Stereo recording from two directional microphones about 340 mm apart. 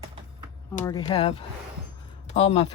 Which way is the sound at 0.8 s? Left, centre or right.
Centre.